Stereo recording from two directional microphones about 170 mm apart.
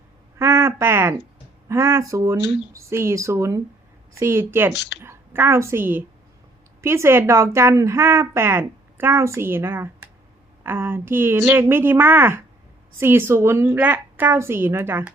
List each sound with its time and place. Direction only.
0.3 s a sound: 15° right (ahead or behind)
1.6 s a woman's voice: 15° right (ahead or behind)
4.7 s speech: 90° left
5.0 s a woman's voice: 15° right (ahead or behind)